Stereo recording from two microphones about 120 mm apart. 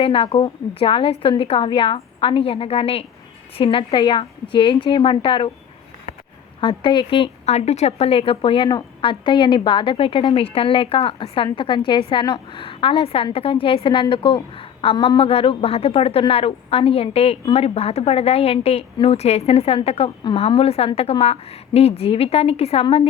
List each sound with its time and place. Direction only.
0.0 s a woman's voice: 50° left (ahead or behind)
6.6 s a woman's voice: 45° left (ahead or behind)
7.4 s a woman's voice: 65° left (ahead or behind)